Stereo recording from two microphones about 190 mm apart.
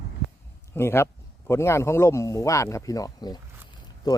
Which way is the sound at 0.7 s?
15° left (ahead or behind).